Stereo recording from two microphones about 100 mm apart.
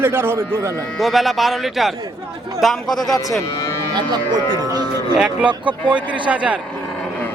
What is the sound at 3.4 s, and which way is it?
Speech, 30° left (ahead or behind).